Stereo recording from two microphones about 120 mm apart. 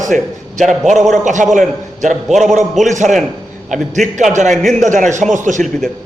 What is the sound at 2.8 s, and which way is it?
A man's voice, 90° right.